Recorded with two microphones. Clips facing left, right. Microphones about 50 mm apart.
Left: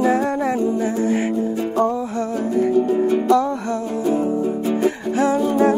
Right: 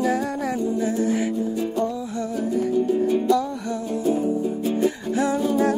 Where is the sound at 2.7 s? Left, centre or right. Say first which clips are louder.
Left 1 dB; left.